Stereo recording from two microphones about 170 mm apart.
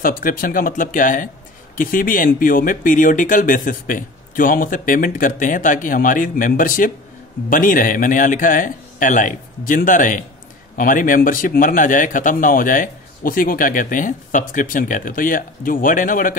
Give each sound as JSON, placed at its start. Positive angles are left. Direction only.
{"t": 0.0, "sound": "speech", "side_deg": 55}